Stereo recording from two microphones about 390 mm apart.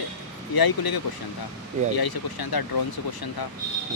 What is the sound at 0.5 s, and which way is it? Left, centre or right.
Speech, left.